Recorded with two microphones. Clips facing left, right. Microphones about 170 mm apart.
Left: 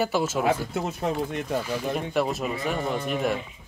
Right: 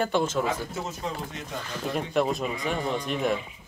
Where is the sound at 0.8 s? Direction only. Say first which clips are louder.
Left 6 dB; 60° left (ahead or behind).